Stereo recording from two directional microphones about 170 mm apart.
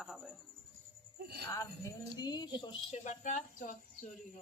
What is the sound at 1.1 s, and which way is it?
Speech, 65° right (ahead or behind).